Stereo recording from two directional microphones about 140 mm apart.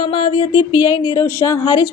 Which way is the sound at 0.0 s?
40° left (ahead or behind).